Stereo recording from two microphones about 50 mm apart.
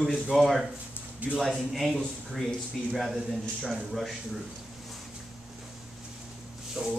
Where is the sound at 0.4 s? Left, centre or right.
Centre.